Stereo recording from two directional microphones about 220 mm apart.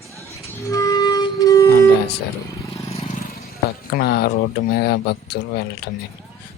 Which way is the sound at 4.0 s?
45° left (ahead or behind).